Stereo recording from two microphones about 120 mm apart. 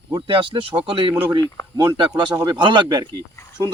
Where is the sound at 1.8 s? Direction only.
40° right (ahead or behind).